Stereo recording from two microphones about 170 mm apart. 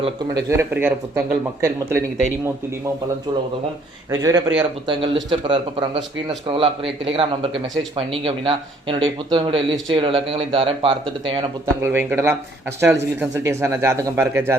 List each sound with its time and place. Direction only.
0.3 s speech: 15° right (ahead or behind)
3.3 s speech: 25° right (ahead or behind)
4.9 s a man's voice: 30° right (ahead or behind)
11.6 s speech: 15° right (ahead or behind)